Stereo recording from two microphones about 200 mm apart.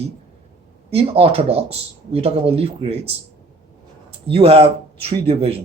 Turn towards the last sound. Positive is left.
turn(degrees=-30)  # may be behind; listen again after turning